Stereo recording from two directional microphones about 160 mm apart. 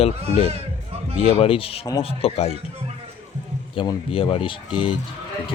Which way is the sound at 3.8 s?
35° left (ahead or behind).